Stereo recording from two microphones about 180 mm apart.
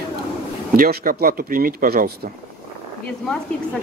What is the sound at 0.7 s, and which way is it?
Speech, 55° right (ahead or behind).